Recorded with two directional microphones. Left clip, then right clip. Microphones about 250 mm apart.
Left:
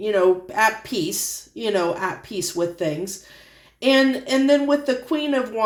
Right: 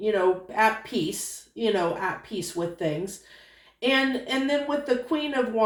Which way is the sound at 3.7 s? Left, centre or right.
Left.